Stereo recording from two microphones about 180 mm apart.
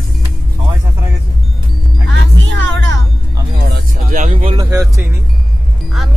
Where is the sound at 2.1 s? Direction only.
85° right.